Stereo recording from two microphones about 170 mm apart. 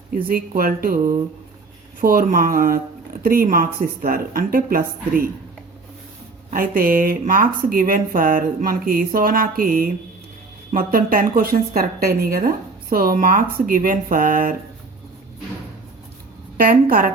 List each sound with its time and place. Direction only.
0.1 s a woman's voice: 60° right (ahead or behind)
6.5 s a woman's voice: 60° right (ahead or behind)
16.6 s a woman's voice: 55° right (ahead or behind)